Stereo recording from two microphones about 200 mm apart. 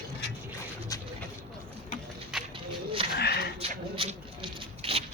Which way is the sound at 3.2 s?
55° left (ahead or behind).